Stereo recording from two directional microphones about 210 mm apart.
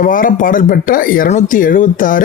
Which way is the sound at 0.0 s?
40° left (ahead or behind).